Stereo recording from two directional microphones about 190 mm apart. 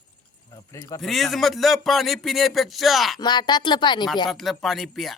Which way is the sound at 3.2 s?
25° left (ahead or behind).